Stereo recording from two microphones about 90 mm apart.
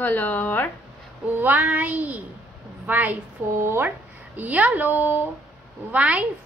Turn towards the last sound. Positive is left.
turn(degrees=-15)  # may be behind; listen again after turning